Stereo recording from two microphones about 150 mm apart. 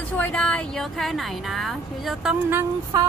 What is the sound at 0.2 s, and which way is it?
A woman's voice, 5° left (ahead or behind).